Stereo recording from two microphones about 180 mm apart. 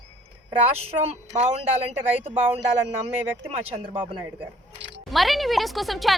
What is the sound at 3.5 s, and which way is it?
Speech, 35° right (ahead or behind).